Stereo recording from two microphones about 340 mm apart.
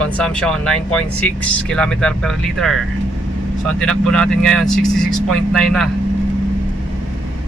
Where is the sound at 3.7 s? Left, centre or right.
Centre.